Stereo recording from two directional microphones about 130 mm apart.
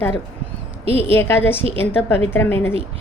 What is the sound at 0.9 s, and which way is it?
A woman's voice, 15° left (ahead or behind).